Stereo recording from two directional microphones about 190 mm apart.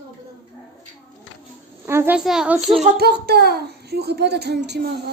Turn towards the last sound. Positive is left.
turn(degrees=-60)  # may be behind; listen again after turning